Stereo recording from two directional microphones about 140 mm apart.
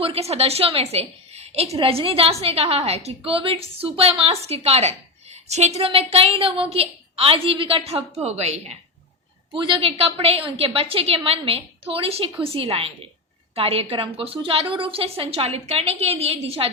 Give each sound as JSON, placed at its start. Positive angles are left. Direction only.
{"t": 0.0, "sound": "a woman's voice", "side_deg": -45}
{"t": 9.5, "sound": "a woman's voice", "side_deg": -35}